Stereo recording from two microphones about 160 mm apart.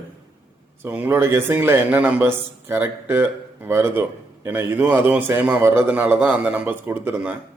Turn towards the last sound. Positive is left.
turn(degrees=-10)  # may be behind; listen again after turning